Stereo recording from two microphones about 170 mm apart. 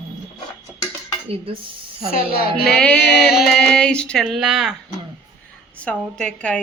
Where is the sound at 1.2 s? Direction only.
35° right (ahead or behind).